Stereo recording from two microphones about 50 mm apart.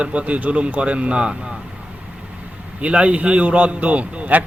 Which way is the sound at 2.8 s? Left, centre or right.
Right.